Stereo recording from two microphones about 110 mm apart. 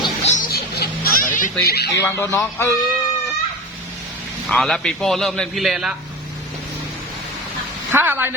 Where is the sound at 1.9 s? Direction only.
25° left (ahead or behind).